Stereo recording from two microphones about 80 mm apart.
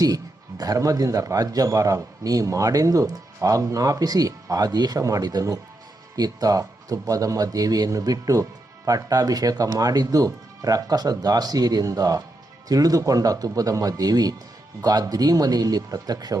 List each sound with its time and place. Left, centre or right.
0.0 s a man's voice: right